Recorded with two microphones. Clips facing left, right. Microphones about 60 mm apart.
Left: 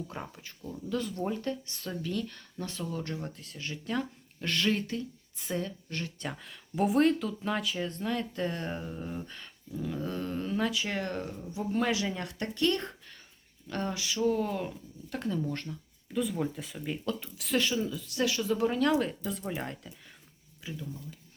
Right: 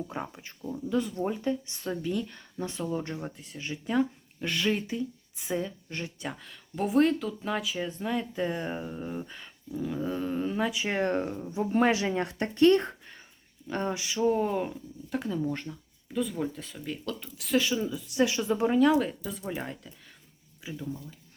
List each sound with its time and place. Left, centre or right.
0.1 s speech: centre
6.2 s speech: centre
15.1 s speech: centre
16.1 s speech: centre; by 18.8 s right
18.8 s speech: centre